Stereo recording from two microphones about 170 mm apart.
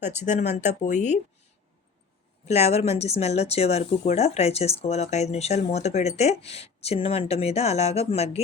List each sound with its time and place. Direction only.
0.0 s speech: 45° left (ahead or behind)
2.5 s speech: 40° left (ahead or behind)